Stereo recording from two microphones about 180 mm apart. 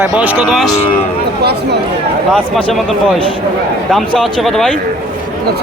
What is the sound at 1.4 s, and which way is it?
Speech, 65° right (ahead or behind).